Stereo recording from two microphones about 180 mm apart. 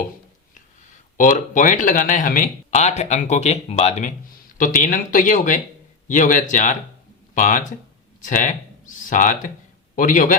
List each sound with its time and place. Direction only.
0.5 s speech: 45° left (ahead or behind)
4.5 s a man's voice: 50° left (ahead or behind)